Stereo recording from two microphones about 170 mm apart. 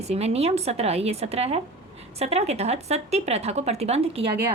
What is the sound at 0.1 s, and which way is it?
A woman's voice, 40° right (ahead or behind).